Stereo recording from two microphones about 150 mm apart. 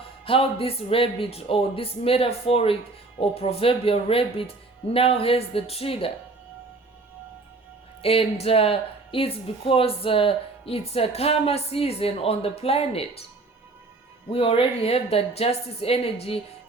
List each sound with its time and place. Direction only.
0.3 s speech: 40° left (ahead or behind)
8.0 s speech: 40° left (ahead or behind)
14.3 s speech: 40° left (ahead or behind)